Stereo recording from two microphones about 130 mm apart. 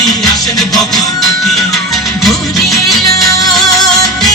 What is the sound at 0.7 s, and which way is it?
Music, centre (ahead or behind).